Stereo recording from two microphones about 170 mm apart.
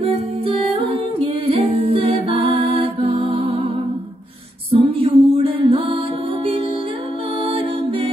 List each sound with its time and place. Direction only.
0.0 s music: 35° right (ahead or behind)
7.4 s music: 30° right (ahead or behind)